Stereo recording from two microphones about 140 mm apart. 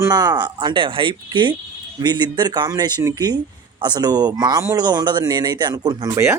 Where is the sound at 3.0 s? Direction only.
20° right (ahead or behind).